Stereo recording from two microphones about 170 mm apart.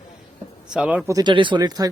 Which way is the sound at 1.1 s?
25° right (ahead or behind).